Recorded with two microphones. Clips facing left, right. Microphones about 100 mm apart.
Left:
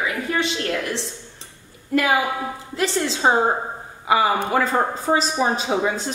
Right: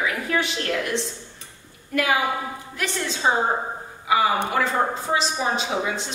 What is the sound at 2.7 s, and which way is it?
A woman's voice, 30° left (ahead or behind).